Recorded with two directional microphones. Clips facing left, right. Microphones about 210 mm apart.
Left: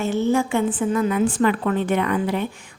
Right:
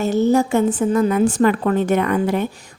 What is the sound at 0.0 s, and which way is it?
A woman's voice, 40° right (ahead or behind).